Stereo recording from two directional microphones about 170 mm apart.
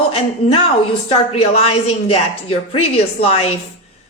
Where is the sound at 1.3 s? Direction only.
35° left (ahead or behind).